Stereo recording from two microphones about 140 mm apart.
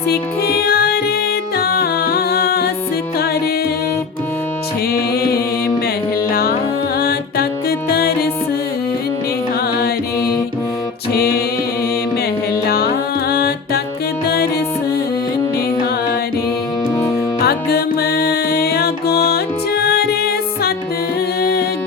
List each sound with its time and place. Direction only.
0.5 s music: 90° left
4.9 s music: 90° left
10.2 s music: 25° left (ahead or behind)
11.1 s music: 90° left
12.6 s music: 90° left
17.4 s music: 90° left